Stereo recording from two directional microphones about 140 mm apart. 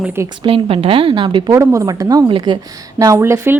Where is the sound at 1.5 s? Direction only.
20° right (ahead or behind).